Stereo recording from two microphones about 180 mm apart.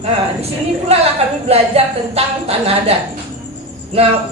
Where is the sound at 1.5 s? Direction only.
35° right (ahead or behind).